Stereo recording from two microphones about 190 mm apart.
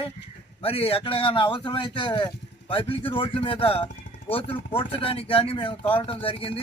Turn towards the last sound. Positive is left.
turn(degrees=30)  # may be behind; listen again after turning